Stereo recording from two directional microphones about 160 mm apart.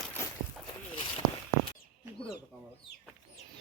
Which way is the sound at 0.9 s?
30° left (ahead or behind).